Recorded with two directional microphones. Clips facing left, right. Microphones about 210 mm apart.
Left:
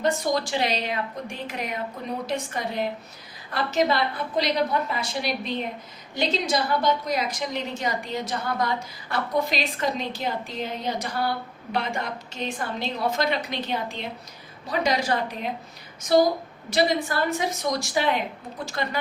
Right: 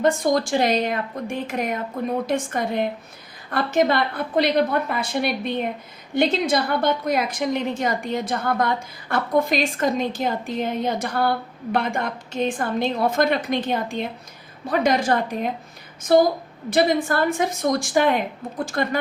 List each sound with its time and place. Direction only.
0.0 s a woman's voice: 50° right (ahead or behind)
16.6 s a woman's voice: 55° right (ahead or behind)